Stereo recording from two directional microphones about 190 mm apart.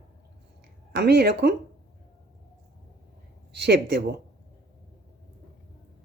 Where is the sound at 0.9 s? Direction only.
60° right (ahead or behind).